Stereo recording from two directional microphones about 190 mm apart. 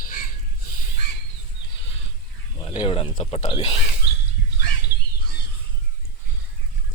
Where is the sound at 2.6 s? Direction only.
30° left (ahead or behind).